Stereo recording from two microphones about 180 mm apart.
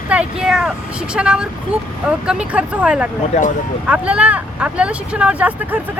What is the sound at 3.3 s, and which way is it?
Speech, 40° left (ahead or behind).